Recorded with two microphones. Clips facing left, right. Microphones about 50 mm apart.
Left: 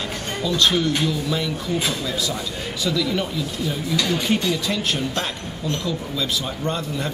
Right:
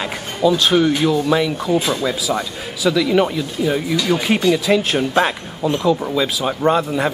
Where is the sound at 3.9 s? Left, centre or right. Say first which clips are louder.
Right 4 dB; centre.